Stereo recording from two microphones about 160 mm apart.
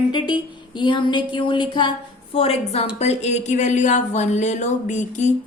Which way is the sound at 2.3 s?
35° left (ahead or behind).